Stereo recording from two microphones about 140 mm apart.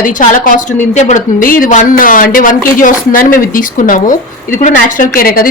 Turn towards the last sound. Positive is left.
turn(degrees=90)